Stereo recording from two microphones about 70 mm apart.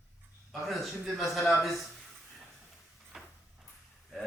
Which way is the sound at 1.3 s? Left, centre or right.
Centre.